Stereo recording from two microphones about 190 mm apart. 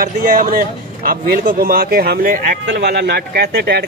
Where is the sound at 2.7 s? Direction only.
60° right (ahead or behind).